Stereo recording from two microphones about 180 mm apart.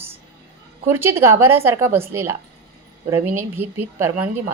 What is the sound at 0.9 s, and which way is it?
Speech, 15° right (ahead or behind).